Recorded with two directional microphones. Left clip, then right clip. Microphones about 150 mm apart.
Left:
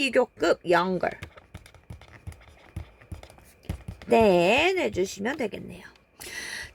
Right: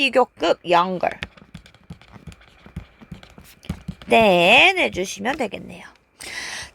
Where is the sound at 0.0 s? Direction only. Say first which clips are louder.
Right 5 dB; 40° right (ahead or behind).